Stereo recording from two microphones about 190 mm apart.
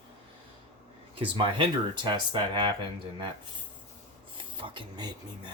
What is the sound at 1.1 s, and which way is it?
Speech, 25° right (ahead or behind).